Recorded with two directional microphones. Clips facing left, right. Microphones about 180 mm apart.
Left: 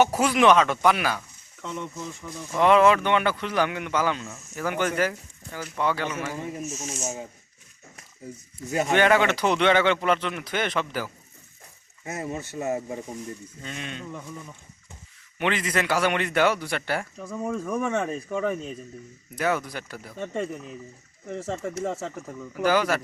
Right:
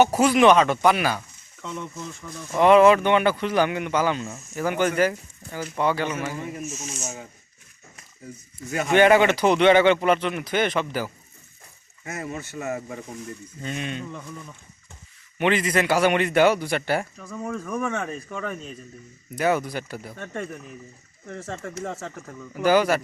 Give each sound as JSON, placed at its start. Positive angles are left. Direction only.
{"t": 0.0, "sound": "speech", "side_deg": -5}
{"t": 2.0, "sound": "speech", "side_deg": 10}
{"t": 2.6, "sound": "speech", "side_deg": -5}
{"t": 8.9, "sound": "speech", "side_deg": -10}
{"t": 12.0, "sound": "speech", "side_deg": 25}
{"t": 13.6, "sound": "speech", "side_deg": -5}
{"t": 14.1, "sound": "speech", "side_deg": 10}
{"t": 15.4, "sound": "speech", "side_deg": -5}
{"t": 17.2, "sound": "speech", "side_deg": 10}
{"t": 17.8, "sound": "speech", "side_deg": 5}
{"t": 19.4, "sound": "speech", "side_deg": -10}
{"t": 20.1, "sound": "speech", "side_deg": 15}
{"t": 22.6, "sound": "speech", "side_deg": -10}